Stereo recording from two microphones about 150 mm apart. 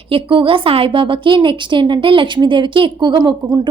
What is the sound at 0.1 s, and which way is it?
A woman's voice, 35° right (ahead or behind).